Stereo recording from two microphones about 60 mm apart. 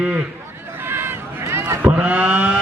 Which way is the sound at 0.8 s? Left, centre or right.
Right.